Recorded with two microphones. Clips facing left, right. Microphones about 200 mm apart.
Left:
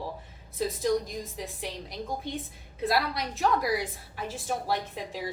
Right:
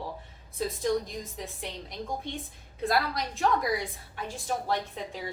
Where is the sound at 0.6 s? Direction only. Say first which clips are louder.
Left 1 dB; centre (ahead or behind).